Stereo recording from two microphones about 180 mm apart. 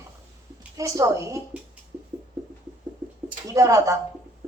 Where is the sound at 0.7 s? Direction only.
20° right (ahead or behind).